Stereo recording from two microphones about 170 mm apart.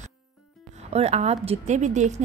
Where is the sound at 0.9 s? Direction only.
40° right (ahead or behind).